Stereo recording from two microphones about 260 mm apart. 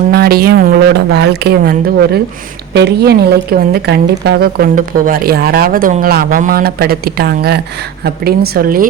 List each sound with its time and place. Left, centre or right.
0.1 s a woman's voice: right